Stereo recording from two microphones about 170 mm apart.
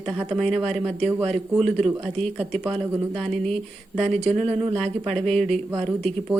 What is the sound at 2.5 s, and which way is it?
Speech, 35° right (ahead or behind).